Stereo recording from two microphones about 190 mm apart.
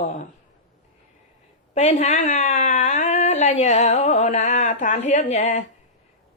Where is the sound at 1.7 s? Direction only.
35° left (ahead or behind).